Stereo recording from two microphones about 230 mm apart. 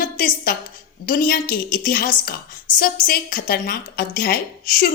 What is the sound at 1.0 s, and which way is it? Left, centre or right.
A woman's voice, left.